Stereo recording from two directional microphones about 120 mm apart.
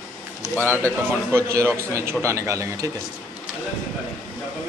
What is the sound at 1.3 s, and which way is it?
Speech, 25° right (ahead or behind).